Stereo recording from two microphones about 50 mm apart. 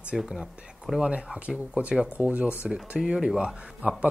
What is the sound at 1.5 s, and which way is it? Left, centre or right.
Speech, right.